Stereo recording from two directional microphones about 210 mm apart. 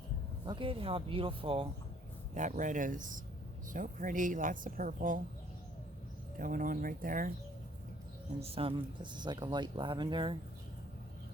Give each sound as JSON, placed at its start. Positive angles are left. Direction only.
{"t": 0.4, "sound": "speech", "side_deg": -25}
{"t": 6.4, "sound": "speech", "side_deg": -40}
{"t": 8.4, "sound": "speech", "side_deg": -30}